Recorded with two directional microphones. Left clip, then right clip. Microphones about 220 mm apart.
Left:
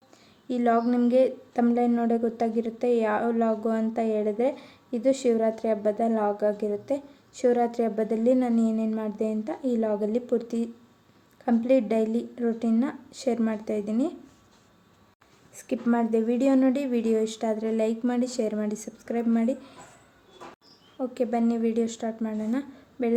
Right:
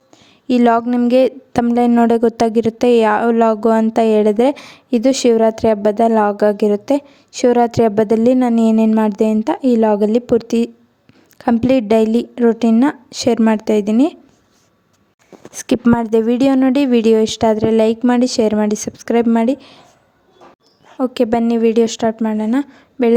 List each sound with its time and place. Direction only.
0.4 s a woman's voice: 45° right (ahead or behind)
15.5 s a woman's voice: 50° right (ahead or behind)
21.0 s a woman's voice: 45° right (ahead or behind)